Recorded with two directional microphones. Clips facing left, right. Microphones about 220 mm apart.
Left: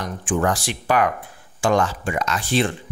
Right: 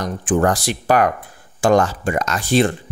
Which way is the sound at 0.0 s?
40° right (ahead or behind).